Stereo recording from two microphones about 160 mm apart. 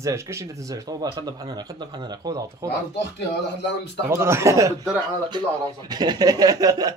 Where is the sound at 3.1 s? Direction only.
90° left.